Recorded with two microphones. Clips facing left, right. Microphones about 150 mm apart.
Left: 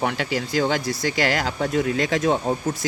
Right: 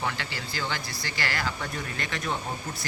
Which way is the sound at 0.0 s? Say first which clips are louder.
Left 9 dB; 60° left (ahead or behind).